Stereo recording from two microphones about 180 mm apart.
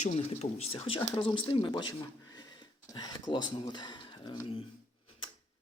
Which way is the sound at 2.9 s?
20° left (ahead or behind).